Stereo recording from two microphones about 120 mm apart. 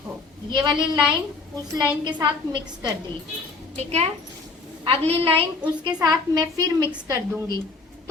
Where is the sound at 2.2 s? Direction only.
40° right (ahead or behind).